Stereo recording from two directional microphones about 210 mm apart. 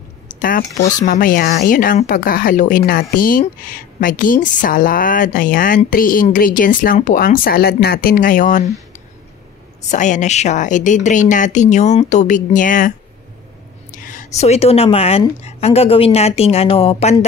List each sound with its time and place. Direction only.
0.4 s a woman's voice: 40° left (ahead or behind)
9.8 s a woman's voice: 35° left (ahead or behind)
13.9 s a woman's voice: 40° left (ahead or behind)